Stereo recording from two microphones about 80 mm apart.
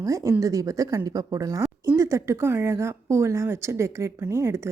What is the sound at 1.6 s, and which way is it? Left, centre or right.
A woman's voice, right.